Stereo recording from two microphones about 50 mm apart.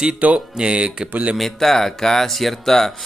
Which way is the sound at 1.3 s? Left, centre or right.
Centre.